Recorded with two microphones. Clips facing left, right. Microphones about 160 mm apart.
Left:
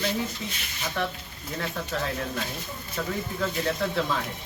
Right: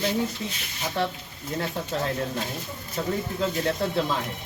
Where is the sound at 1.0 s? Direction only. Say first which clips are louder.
Right 3 dB; 35° right (ahead or behind).